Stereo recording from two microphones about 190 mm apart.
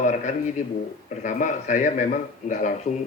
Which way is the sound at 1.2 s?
40° left (ahead or behind).